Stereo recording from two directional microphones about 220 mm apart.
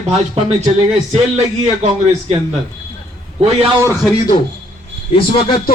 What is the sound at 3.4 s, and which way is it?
Speech, 25° right (ahead or behind).